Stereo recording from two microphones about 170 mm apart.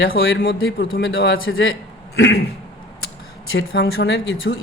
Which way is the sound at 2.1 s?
80° left.